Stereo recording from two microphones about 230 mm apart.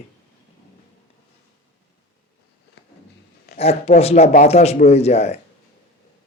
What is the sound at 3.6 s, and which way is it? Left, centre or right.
A man's voice, left.